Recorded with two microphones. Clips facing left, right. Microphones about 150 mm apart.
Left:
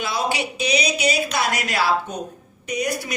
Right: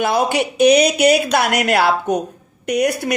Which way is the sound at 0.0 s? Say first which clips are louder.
Right 7 dB; 50° right (ahead or behind).